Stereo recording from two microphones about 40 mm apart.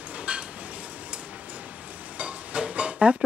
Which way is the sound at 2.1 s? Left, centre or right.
Right.